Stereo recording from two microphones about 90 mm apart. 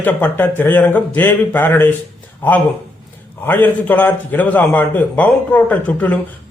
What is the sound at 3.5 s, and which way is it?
A man's voice, 20° left (ahead or behind).